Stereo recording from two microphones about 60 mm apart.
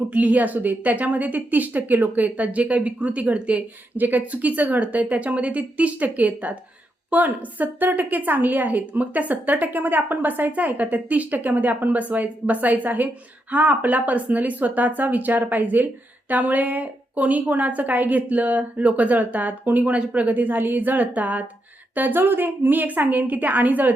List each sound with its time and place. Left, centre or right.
0.1 s a woman's voice: right